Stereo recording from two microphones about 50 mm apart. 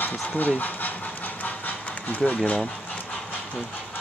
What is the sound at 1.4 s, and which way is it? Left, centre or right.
Pant, left.